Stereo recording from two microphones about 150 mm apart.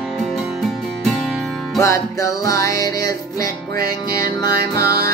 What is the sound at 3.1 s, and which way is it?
Music, 85° right.